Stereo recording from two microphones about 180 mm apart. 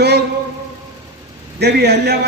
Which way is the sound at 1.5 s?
65° right (ahead or behind).